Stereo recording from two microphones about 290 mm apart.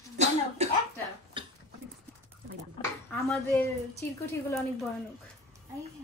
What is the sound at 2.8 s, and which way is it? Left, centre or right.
Speech, centre.